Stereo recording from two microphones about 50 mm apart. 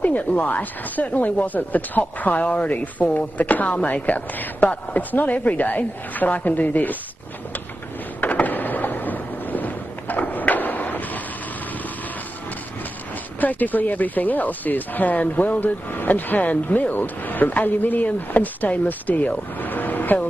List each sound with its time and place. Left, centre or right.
0.0 s speech: left
8.2 s a sound: left
13.4 s speech: left